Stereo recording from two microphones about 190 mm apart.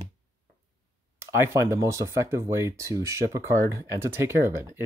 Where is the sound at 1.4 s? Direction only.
15° right (ahead or behind).